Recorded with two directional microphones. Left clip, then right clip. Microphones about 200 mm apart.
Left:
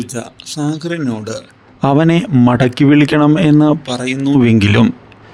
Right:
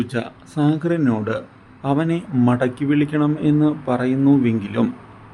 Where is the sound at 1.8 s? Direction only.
50° left (ahead or behind).